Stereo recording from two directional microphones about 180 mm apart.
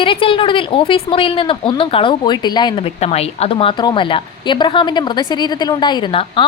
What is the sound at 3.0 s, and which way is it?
A woman's voice, 35° left (ahead or behind).